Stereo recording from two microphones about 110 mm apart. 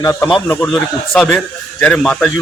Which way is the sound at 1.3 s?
15° left (ahead or behind).